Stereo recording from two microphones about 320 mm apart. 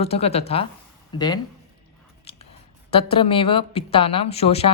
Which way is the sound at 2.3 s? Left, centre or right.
Centre.